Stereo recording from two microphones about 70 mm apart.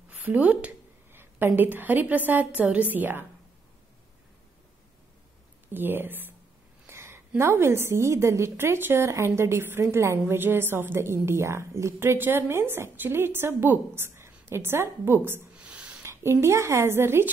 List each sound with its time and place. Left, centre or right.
0.2 s a woman's voice: right
1.1 s a woman's voice: right
5.7 s a woman's voice: right
15.5 s a sound: centre
16.0 s a woman's voice: right